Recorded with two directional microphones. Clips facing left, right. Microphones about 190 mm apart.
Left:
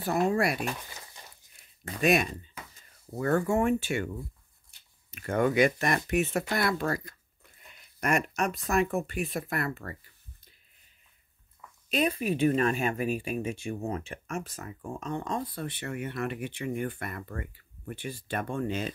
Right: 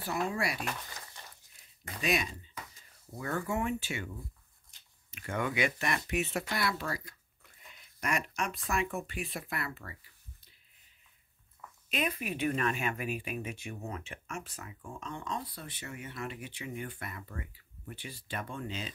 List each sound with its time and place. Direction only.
0.0 s speech: 50° left (ahead or behind)
0.6 s speech: 15° left (ahead or behind)
2.0 s speech: 55° left (ahead or behind)
5.1 s speech: 45° left (ahead or behind)
11.9 s speech: 35° left (ahead or behind); by 18.9 s 55° left (ahead or behind)